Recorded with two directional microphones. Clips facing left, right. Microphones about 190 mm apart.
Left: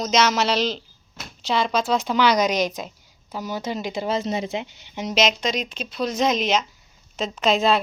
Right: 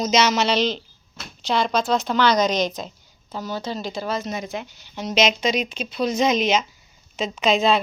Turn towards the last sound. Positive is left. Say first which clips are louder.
# right 1 dB
turn(degrees=0)  # may be behind; listen again after turning